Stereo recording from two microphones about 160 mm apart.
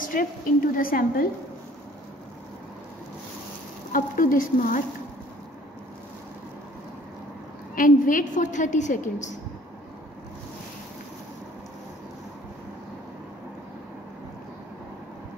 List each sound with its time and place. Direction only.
0.0 s a sound: 60° left (ahead or behind)
0.7 s a woman's voice: 60° left (ahead or behind)
3.9 s a woman's voice: 60° left (ahead or behind)
7.7 s a woman's voice: 60° left (ahead or behind)